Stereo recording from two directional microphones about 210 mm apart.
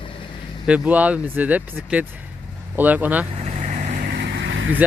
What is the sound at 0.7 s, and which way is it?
Speech, 5° right (ahead or behind).